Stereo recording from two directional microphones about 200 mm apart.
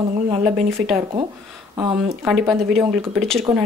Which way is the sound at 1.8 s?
25° right (ahead or behind).